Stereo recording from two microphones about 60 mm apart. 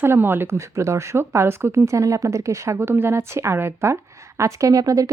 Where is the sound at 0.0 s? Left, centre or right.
Right.